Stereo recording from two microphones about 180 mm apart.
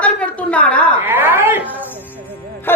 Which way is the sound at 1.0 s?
10° right (ahead or behind).